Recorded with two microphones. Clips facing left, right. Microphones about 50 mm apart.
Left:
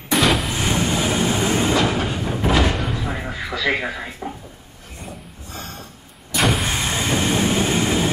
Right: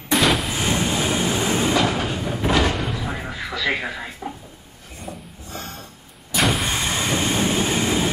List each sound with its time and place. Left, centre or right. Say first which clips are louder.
0.1 s vehicle: left 1 dB; centre
0.6 s train: left 1 dB; centre
0.8 s vehicle: left 1 dB; centre
1.3 s train: left 2 dB; centre
1.9 s train: left 1 dB; centre
2.7 s a sound: left 1 dB; centre
3.3 s music: left 2 dB; left
3.6 s speech: left 2 dB; centre
5.0 s a sound: right 2 dB; centre
6.3 s vehicle: left 1 dB; centre
7.0 s train: left 3 dB; centre